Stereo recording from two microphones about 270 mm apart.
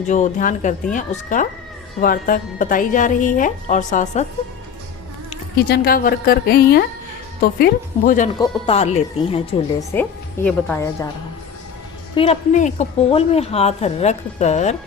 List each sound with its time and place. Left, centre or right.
0.1 s a woman's voice: left
5.5 s a woman's voice: left
9.9 s a woman's voice: centre
12.1 s a woman's voice: left